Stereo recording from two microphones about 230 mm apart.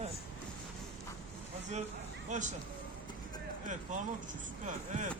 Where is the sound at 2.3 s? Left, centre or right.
Right.